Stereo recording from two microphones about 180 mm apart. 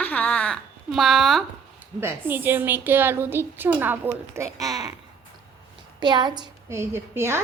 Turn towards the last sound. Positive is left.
turn(degrees=-15)  # may be behind; listen again after turning